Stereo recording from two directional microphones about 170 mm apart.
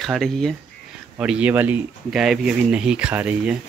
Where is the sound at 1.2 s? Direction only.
5° right (ahead or behind).